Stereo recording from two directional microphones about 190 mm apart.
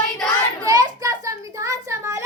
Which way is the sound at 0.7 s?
20° right (ahead or behind).